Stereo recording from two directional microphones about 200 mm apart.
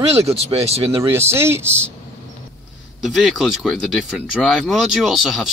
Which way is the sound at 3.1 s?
Centre (ahead or behind).